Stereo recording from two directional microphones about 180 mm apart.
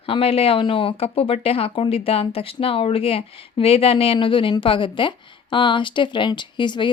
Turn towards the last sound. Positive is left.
turn(degrees=25)  # may be behind; listen again after turning